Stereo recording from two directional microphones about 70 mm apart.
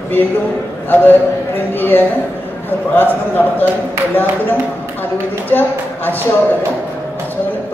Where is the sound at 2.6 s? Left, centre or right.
Left.